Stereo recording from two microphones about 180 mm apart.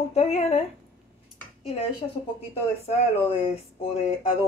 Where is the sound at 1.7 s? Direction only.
30° left (ahead or behind).